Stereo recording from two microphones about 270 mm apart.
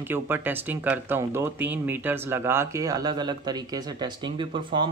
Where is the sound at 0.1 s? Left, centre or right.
Centre.